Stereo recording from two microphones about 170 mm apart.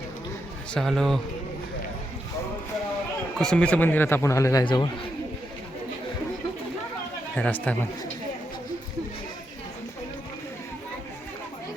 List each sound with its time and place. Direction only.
0.7 s speech: centre (ahead or behind)
3.3 s speech: 5° left (ahead or behind)
4.6 s a man's voice: 30° left (ahead or behind)
7.3 s speech: 10° left (ahead or behind)